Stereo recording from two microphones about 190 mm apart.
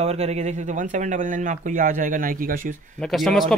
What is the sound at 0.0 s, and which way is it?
Speech, 35° right (ahead or behind).